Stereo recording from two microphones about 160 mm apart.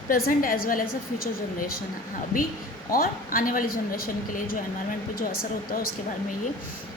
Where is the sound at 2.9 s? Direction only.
60° left (ahead or behind).